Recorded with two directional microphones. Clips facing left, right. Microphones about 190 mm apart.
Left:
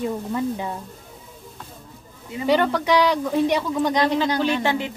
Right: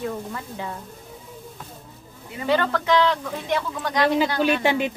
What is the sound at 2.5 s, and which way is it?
A woman's voice, 15° left (ahead or behind).